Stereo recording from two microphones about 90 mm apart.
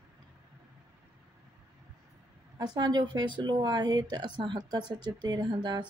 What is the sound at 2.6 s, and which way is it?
Speech, 50° right (ahead or behind).